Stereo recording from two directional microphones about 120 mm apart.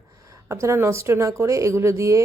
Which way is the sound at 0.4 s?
25° right (ahead or behind).